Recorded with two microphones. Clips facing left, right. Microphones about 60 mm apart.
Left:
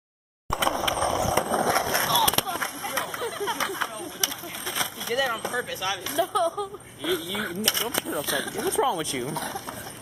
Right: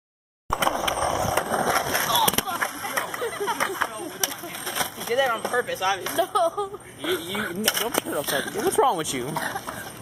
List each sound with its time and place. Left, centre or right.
0.5 s a sound: centre
0.9 s vehicle: centre
1.2 s vehicle: centre
1.5 s skateboard: centre
2.4 s a sound: centre
5.1 s speech: centre
5.5 s speech: centre
6.1 s speech: centre
9.3 s speech: right